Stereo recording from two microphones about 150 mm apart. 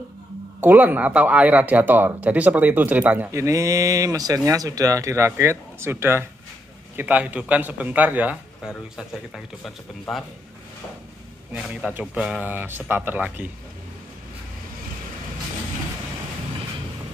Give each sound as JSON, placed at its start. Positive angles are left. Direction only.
{"t": 0.6, "sound": "speech", "side_deg": -10}
{"t": 11.5, "sound": "speech", "side_deg": -5}